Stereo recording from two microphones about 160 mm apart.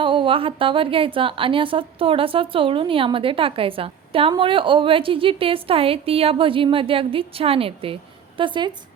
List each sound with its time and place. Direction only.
0.0 s a woman's voice: 30° right (ahead or behind)